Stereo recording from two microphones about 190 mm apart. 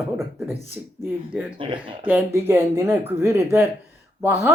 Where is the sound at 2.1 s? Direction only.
10° right (ahead or behind).